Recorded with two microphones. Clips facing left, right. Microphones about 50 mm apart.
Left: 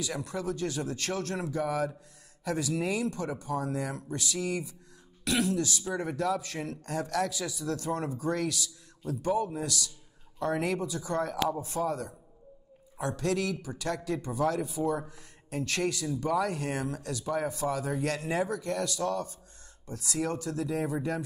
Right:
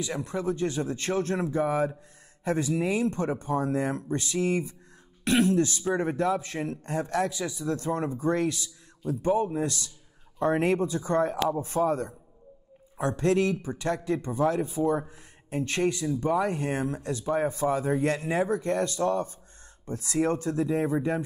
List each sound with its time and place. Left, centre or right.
0.0 s a man's voice: right